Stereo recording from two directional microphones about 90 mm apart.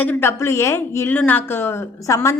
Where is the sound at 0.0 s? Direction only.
20° left (ahead or behind).